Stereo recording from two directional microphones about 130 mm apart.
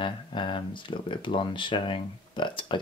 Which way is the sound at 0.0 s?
40° left (ahead or behind).